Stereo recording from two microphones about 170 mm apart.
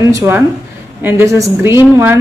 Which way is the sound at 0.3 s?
15° right (ahead or behind).